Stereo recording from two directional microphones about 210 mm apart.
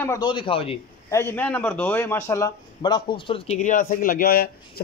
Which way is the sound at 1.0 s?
10° left (ahead or behind).